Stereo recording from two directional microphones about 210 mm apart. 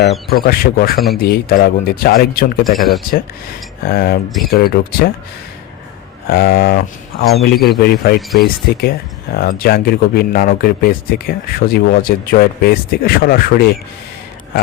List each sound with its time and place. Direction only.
0.3 s speech: 45° left (ahead or behind)
3.8 s speech: 45° left (ahead or behind)
6.3 s speech: 45° left (ahead or behind)